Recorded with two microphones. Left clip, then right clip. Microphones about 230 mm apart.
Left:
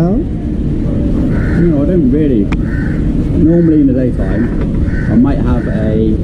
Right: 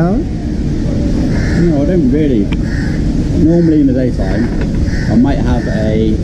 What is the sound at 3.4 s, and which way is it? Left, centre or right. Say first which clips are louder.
Speech: left 1 dB; right.